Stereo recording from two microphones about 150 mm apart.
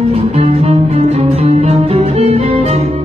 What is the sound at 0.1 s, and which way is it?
Music, 45° right (ahead or behind).